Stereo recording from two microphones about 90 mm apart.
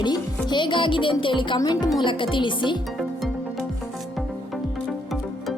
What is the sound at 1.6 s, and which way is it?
Music, 50° left (ahead or behind).